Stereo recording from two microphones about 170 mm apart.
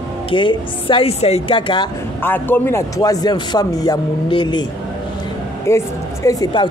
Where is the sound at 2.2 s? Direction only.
10° left (ahead or behind); by 4.7 s 25° left (ahead or behind).